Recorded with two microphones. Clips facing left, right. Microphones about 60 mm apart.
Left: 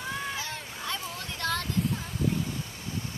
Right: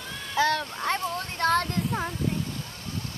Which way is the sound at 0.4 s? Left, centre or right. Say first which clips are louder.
Right 14 dB; right.